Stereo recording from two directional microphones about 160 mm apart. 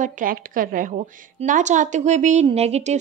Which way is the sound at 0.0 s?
60° right (ahead or behind).